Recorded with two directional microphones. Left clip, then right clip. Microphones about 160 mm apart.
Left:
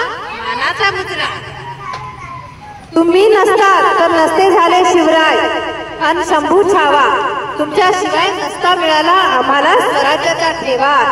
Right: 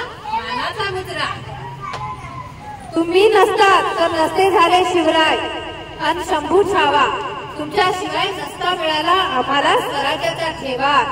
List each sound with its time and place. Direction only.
0.7 s chatter: 45° left (ahead or behind)
3.0 s a woman's voice: 40° left (ahead or behind)